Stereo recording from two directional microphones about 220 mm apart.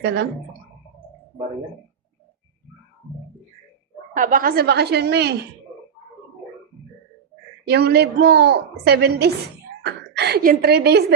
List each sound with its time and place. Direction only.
4.1 s a woman's voice: 35° right (ahead or behind)
7.7 s a woman's voice: 45° right (ahead or behind)